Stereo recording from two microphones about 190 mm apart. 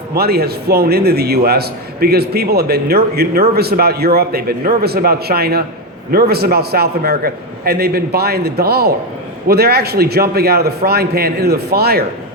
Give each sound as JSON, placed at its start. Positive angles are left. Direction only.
{"t": 0.1, "sound": "a man's voice", "side_deg": -55}